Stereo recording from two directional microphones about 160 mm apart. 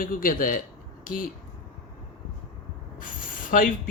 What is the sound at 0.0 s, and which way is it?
Speech, 60° left (ahead or behind).